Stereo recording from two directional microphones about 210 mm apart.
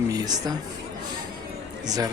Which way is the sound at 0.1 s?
20° right (ahead or behind).